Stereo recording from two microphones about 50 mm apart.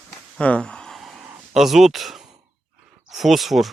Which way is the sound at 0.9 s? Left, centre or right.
Centre.